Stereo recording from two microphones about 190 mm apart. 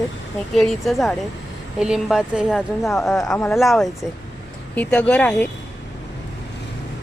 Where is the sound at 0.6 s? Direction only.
Centre (ahead or behind).